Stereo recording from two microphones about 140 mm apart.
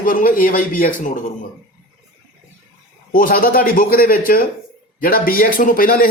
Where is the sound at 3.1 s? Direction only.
85° left.